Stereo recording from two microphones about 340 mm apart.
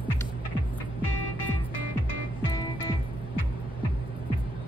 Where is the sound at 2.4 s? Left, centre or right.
Centre.